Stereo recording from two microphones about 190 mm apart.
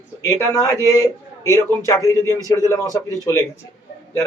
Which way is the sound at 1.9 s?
15° left (ahead or behind).